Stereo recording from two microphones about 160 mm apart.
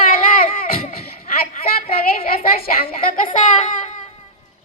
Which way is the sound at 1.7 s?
65° left (ahead or behind).